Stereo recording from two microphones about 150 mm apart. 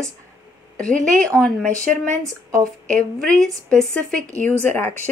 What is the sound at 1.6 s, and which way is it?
Speech, 55° right (ahead or behind).